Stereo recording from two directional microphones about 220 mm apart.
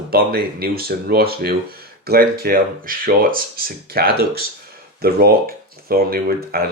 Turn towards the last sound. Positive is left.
turn(degrees=-45)  # may be behind; listen again after turning